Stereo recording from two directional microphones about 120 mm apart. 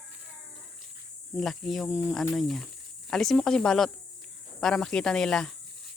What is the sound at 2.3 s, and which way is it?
Speech, centre (ahead or behind).